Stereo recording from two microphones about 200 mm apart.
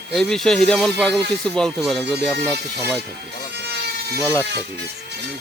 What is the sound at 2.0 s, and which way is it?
Speech, 55° right (ahead or behind).